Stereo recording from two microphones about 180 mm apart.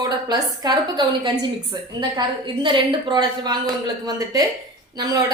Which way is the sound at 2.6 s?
25° right (ahead or behind).